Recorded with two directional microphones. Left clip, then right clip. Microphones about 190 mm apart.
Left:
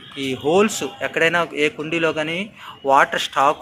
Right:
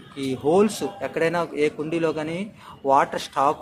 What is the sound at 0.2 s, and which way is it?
A man's voice, 5° right (ahead or behind).